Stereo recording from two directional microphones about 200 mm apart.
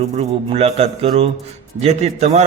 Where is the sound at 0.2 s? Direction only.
30° right (ahead or behind).